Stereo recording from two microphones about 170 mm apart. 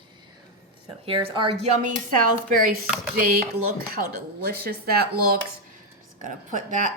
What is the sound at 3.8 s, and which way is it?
Speech, 65° right (ahead or behind).